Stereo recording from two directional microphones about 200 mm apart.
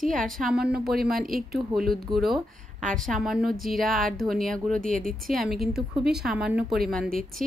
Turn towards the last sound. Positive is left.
turn(degrees=0)  # may be behind; listen again after turning